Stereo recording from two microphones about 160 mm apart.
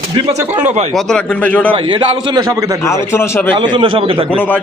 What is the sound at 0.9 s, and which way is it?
Speech, 5° left (ahead or behind).